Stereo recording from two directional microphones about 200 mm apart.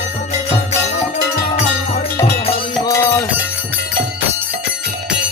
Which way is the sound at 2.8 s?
15° left (ahead or behind).